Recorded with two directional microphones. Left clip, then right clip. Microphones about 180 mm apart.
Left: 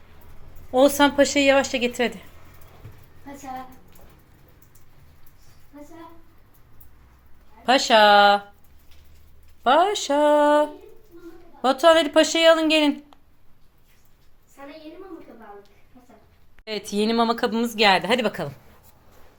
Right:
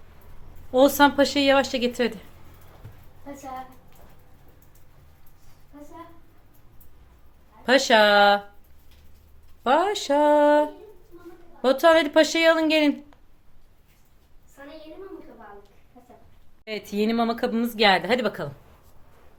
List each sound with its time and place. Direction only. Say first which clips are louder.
0.7 s speech: even; 5° right (ahead or behind)
7.6 s speech: left 2 dB; 15° right (ahead or behind)
9.6 s speech: left 3 dB; 10° right (ahead or behind)
15.9 s a sound: right 2 dB; 35° right (ahead or behind)
16.6 s speech: left 2 dB; 5° left (ahead or behind)